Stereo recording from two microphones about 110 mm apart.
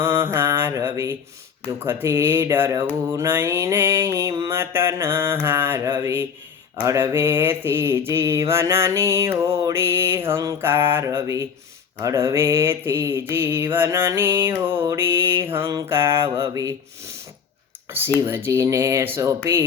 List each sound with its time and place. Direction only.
0.0 s mantra: 20° right (ahead or behind)
18.3 s mantra: 20° right (ahead or behind)